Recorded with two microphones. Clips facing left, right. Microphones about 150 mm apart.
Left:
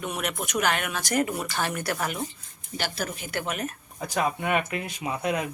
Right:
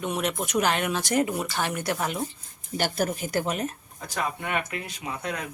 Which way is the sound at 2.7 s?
45° right (ahead or behind).